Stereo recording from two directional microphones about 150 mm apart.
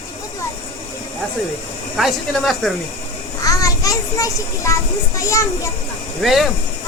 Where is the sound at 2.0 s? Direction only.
Centre (ahead or behind).